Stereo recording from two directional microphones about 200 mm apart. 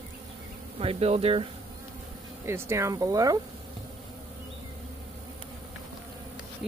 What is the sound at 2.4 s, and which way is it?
Speech, 10° right (ahead or behind).